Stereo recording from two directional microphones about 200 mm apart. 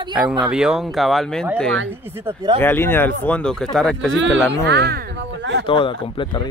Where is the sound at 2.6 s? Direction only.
10° left (ahead or behind).